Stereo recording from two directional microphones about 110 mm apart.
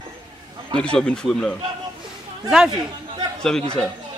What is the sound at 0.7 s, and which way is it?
Speech, 10° left (ahead or behind).